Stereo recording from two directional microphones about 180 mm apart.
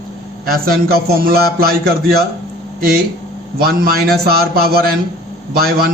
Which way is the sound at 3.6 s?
55° right (ahead or behind).